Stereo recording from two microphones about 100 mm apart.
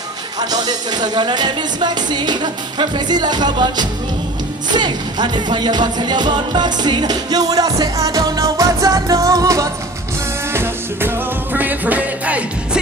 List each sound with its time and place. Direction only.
0.4 s music: 40° right (ahead or behind)
10.5 s music: 25° right (ahead or behind)